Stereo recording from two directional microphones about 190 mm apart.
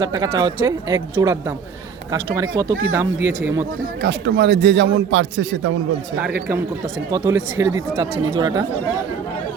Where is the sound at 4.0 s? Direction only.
65° right (ahead or behind); by 5.7 s 85° right.